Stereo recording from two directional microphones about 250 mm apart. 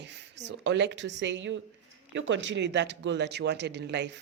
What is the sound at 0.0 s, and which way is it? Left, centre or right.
Speech, right.